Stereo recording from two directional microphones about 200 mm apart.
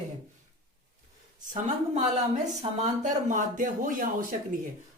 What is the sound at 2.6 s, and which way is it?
Speech, 35° right (ahead or behind).